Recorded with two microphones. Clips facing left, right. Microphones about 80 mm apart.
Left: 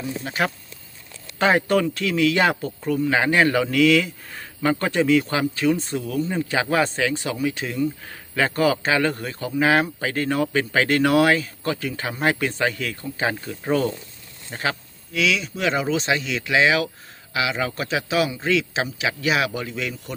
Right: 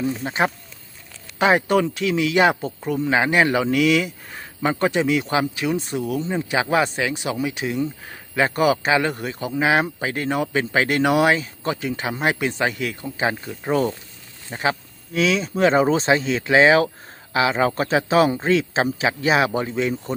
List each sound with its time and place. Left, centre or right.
0.2 s speech: right
1.4 s a man's voice: centre
15.1 s a man's voice: right